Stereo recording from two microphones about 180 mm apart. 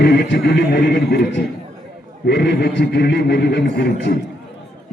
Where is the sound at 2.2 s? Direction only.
70° left (ahead or behind).